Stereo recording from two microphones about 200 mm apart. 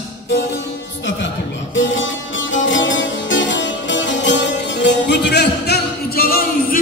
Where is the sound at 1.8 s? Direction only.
70° left (ahead or behind).